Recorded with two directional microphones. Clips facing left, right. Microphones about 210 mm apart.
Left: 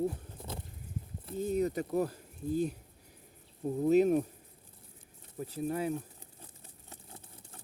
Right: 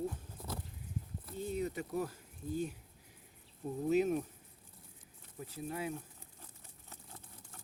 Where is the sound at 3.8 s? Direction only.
40° left (ahead or behind).